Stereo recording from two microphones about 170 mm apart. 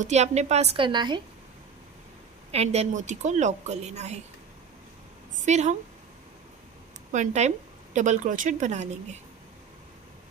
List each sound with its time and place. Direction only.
0.0 s a woman's voice: 40° right (ahead or behind)
2.5 s a woman's voice: 40° right (ahead or behind)
5.3 s a woman's voice: 45° right (ahead or behind)
7.1 s a woman's voice: 45° right (ahead or behind)